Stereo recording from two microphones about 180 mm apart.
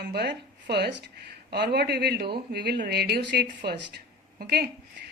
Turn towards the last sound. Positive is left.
turn(degrees=-60)  # may be behind; listen again after turning